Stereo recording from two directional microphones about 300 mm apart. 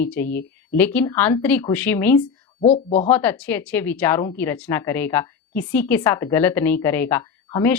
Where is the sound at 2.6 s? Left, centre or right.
Left.